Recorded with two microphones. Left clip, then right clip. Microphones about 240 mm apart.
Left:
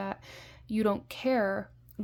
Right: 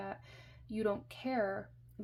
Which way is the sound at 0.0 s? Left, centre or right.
Left.